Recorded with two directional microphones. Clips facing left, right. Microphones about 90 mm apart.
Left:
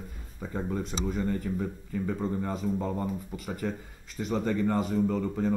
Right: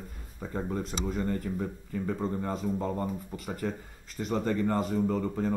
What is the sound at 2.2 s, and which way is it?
Speech, 40° right (ahead or behind).